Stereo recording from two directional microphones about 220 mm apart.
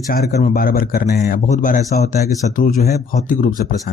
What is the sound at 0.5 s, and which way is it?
Speech, 40° left (ahead or behind).